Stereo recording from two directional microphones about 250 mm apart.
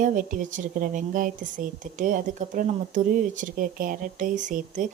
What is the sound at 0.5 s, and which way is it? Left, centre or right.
A woman's voice, right.